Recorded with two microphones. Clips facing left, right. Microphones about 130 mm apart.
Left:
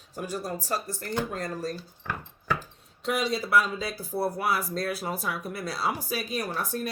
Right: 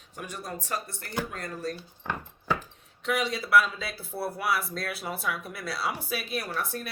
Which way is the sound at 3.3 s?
40° left (ahead or behind).